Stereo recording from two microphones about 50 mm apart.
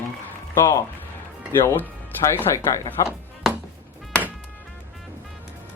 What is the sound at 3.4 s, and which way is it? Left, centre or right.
Music, centre.